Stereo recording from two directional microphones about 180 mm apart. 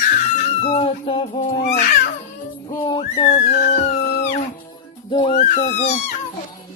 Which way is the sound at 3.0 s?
35° left (ahead or behind).